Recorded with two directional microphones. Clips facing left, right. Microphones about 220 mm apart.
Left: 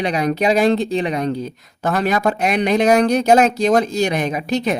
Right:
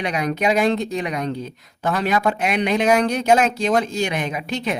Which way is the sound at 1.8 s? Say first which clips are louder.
Left 2 dB; 45° left (ahead or behind).